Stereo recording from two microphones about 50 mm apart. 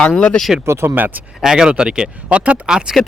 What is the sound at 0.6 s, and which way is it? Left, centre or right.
Speech, right.